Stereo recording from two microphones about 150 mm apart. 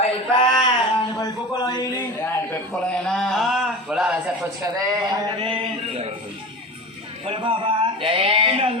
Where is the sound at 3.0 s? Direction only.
5° left (ahead or behind).